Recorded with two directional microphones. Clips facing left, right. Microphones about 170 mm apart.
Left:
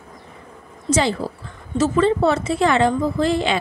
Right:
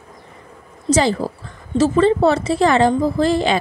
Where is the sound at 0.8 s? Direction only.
40° right (ahead or behind).